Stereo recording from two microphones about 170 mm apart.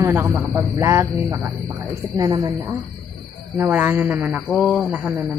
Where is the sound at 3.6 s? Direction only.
10° right (ahead or behind).